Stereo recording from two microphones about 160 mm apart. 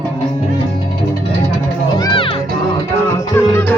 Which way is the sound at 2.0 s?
30° left (ahead or behind).